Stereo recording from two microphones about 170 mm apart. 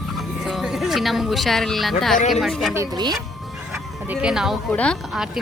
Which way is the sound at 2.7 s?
20° right (ahead or behind).